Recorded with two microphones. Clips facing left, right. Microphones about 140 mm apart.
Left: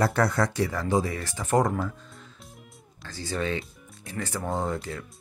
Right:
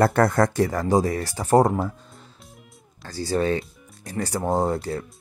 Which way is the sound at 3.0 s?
35° right (ahead or behind).